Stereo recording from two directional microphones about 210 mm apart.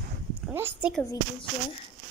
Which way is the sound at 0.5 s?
10° right (ahead or behind).